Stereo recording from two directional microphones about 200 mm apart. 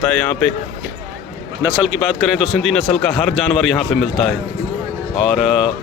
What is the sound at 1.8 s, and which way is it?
Speech, centre (ahead or behind).